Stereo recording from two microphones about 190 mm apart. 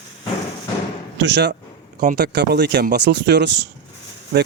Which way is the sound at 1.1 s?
65° right (ahead or behind).